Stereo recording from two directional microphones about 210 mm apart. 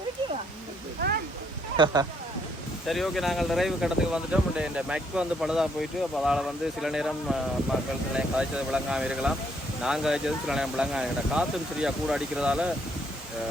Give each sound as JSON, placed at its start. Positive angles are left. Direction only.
{"t": 1.7, "sound": "speech", "side_deg": -20}
{"t": 2.8, "sound": "speech", "side_deg": 0}